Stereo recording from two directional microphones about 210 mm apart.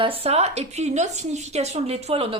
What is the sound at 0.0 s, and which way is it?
A woman's voice, 25° right (ahead or behind).